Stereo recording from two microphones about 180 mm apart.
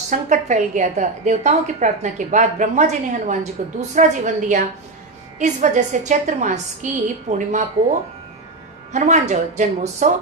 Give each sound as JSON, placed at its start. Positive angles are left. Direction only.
{"t": 0.1, "sound": "a woman's voice", "side_deg": -40}
{"t": 8.9, "sound": "a woman's voice", "side_deg": -40}